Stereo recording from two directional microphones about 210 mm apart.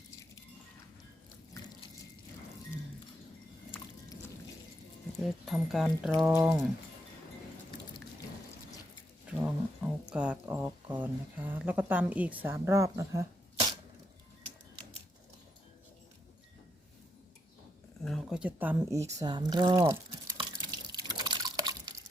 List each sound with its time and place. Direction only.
5.1 s speech: centre (ahead or behind)
9.2 s speech: 5° right (ahead or behind)
18.0 s a sound: centre (ahead or behind)
19.2 s drip: 20° right (ahead or behind)